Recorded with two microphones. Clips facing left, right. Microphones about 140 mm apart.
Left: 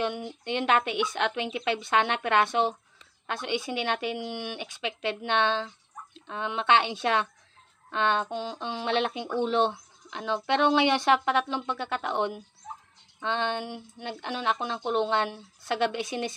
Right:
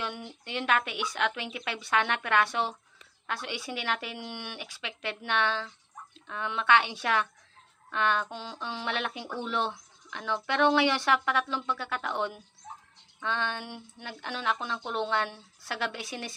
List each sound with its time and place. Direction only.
0.4 s speech: 20° left (ahead or behind)